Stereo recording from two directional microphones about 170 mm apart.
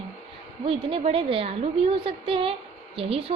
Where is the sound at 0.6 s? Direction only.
35° right (ahead or behind).